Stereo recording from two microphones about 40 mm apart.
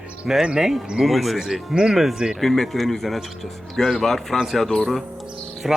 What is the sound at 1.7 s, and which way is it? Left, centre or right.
Speech, right.